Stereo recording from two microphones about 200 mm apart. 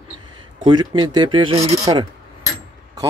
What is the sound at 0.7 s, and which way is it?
Speech, 20° right (ahead or behind).